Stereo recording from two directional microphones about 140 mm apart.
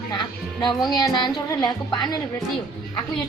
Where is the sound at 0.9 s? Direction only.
30° left (ahead or behind).